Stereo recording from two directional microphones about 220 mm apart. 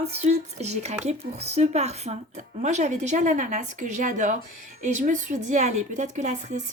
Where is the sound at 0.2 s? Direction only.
30° right (ahead or behind).